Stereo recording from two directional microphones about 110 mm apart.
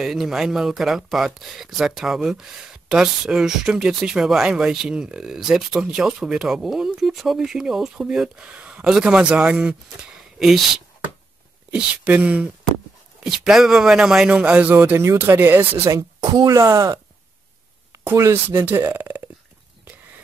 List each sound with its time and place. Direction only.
0.0 s speech: 5° right (ahead or behind)
11.7 s a man's voice: 10° right (ahead or behind)
15.9 s speech: 30° right (ahead or behind); by 19.2 s 15° right (ahead or behind)